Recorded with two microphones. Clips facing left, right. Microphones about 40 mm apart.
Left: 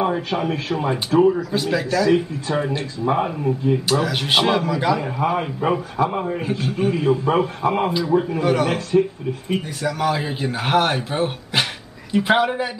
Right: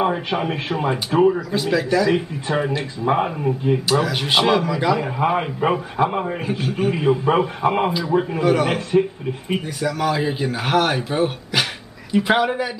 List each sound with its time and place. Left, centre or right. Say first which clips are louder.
0.0 s speech: right 1 dB; centre
1.5 s speech: right 1 dB; centre
2.0 s speech: left 1 dB; centre
4.0 s speech: even; centre
5.2 s a man's voice: right 2 dB; right
8.5 s speech: right 2 dB; centre
9.8 s speech: right 1 dB; centre